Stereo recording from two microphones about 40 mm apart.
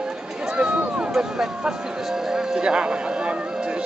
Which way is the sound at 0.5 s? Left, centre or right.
Right.